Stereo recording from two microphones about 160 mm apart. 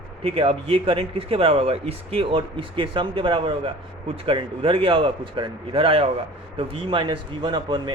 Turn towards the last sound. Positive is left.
turn(degrees=-30)  # may be behind; listen again after turning